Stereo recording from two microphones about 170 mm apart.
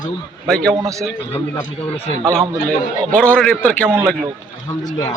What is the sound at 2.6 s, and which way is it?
A man's voice, 5° left (ahead or behind).